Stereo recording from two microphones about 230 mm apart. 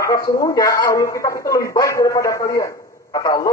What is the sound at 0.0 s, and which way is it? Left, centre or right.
Speech, centre.